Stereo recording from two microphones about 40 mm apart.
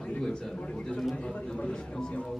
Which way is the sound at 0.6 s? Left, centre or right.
Left.